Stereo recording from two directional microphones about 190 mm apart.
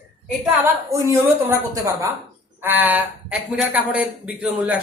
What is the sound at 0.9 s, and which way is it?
Speech, 15° right (ahead or behind).